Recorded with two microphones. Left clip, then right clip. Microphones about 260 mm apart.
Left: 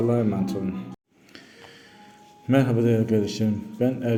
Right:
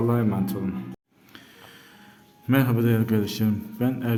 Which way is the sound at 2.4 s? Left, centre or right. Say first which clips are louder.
Left 2 dB; centre.